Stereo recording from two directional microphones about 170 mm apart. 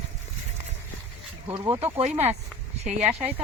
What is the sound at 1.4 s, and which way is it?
Speech, 35° right (ahead or behind).